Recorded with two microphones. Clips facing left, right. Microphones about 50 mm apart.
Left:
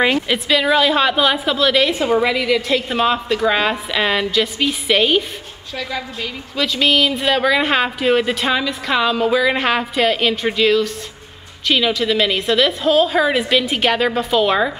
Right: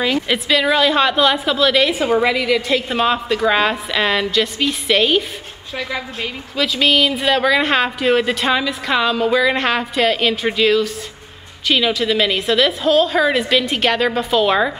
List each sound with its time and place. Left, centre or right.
0.3 s a woman's voice: centre
5.8 s a woman's voice: centre
6.5 s a woman's voice: centre